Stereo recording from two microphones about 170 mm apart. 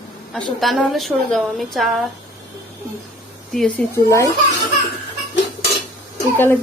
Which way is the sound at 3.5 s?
5° left (ahead or behind).